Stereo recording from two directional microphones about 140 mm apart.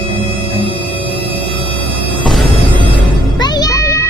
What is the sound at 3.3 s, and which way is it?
Music, 30° left (ahead or behind).